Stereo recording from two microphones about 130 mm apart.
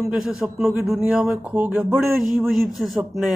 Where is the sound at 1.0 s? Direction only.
10° right (ahead or behind).